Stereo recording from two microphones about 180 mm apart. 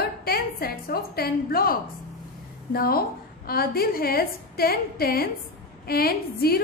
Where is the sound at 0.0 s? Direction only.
60° left (ahead or behind).